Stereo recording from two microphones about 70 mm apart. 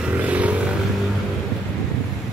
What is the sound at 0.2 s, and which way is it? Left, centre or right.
Vehicle, centre.